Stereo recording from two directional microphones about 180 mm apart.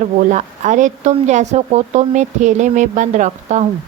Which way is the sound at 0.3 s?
45° right (ahead or behind).